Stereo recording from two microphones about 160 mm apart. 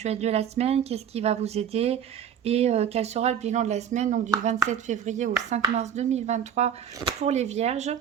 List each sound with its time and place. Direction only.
0.0 s speech: 40° right (ahead or behind)